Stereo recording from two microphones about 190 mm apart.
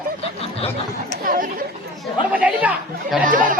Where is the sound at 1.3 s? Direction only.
45° right (ahead or behind).